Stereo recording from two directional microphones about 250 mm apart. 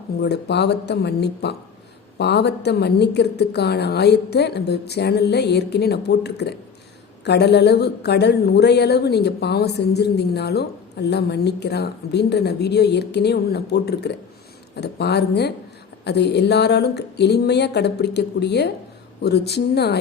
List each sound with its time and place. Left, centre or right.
0.2 s a woman's voice: left